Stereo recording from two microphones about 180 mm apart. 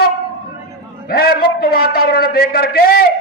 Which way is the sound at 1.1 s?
60° left (ahead or behind).